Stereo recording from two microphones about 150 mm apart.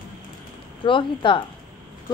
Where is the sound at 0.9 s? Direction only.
35° left (ahead or behind).